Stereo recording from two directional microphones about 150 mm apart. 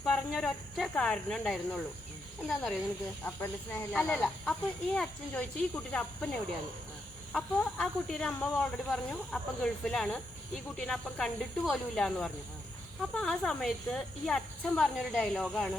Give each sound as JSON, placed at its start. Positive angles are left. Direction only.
{"t": 0.0, "sound": "speech", "side_deg": 5}
{"t": 3.2, "sound": "speech", "side_deg": 15}